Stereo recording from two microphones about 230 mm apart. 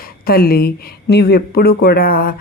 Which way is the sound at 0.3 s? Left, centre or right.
Left.